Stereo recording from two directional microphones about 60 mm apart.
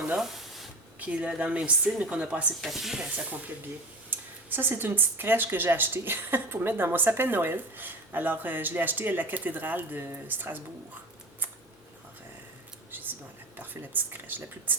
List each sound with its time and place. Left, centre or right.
0.2 s a sound: centre
0.9 s speech: right
2.6 s speech: centre
4.1 s a sound: right
4.7 s a woman's voice: right
13.6 s a woman's voice: right